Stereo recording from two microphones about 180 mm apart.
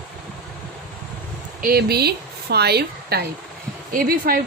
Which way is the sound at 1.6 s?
55° right (ahead or behind).